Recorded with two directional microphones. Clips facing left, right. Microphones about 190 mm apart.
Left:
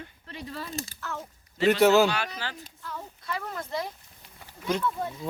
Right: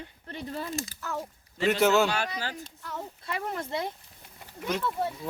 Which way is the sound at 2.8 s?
20° right (ahead or behind).